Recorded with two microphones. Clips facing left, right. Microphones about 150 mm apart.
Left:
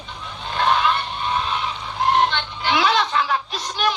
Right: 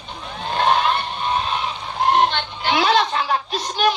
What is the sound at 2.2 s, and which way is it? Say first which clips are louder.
Music: right 1 dB; 50° right (ahead or behind).